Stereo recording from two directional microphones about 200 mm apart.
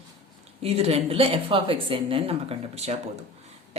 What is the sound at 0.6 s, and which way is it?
Speech, 30° right (ahead or behind).